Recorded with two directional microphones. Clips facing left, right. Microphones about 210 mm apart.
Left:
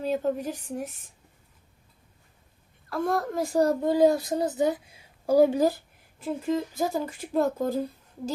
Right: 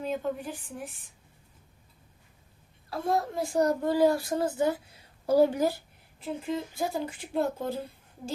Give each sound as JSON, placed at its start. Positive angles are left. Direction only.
{"t": 0.0, "sound": "speech", "side_deg": 40}
{"t": 2.9, "sound": "speech", "side_deg": 50}
{"t": 3.6, "sound": "a child's voice", "side_deg": 25}
{"t": 5.5, "sound": "speech", "side_deg": 35}
{"t": 6.1, "sound": "speech", "side_deg": 45}